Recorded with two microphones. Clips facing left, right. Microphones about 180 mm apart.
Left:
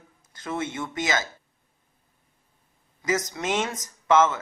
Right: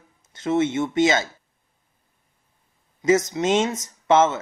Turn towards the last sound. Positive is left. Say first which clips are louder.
# right 2 dB
turn(degrees=-25)  # may be behind; listen again after turning